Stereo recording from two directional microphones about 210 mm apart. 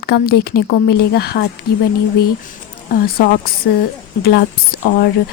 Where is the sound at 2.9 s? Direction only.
45° left (ahead or behind).